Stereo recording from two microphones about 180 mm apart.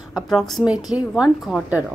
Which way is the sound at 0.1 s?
Centre (ahead or behind).